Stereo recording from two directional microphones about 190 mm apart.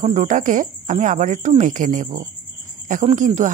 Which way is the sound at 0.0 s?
40° right (ahead or behind).